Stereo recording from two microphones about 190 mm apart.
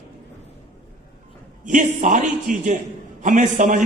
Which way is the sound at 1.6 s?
40° right (ahead or behind).